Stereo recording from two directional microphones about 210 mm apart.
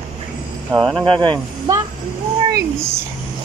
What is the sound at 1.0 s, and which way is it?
Speech, 25° right (ahead or behind).